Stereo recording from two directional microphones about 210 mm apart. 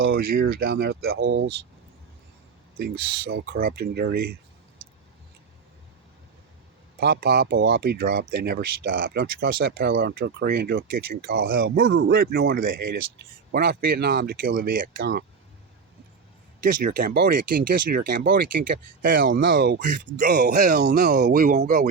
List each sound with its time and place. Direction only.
0.2 s speech: 45° right (ahead or behind)
2.7 s speech: 45° right (ahead or behind)
7.0 s speech: 50° right (ahead or behind)
16.8 s speech: 45° right (ahead or behind)
19.3 s speech: 60° right (ahead or behind)
19.5 s speech: 45° right (ahead or behind)